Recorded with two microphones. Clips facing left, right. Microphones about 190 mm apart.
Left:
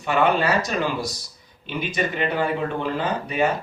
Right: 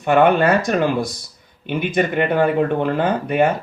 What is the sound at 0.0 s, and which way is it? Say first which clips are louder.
Speech: right 6 dB; 55° right (ahead or behind).